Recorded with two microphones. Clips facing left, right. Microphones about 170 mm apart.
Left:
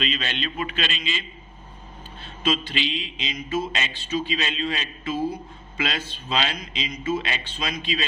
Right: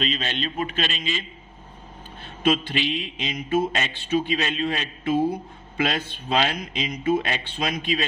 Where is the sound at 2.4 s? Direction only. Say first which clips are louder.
Right 3 dB; 55° right (ahead or behind).